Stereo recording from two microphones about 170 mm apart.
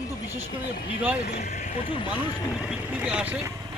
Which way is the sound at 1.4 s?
45° left (ahead or behind).